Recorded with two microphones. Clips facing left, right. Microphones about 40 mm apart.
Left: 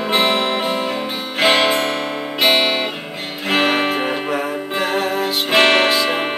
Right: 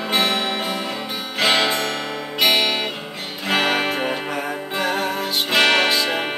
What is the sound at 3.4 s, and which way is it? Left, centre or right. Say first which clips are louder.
Music: left 3 dB; centre.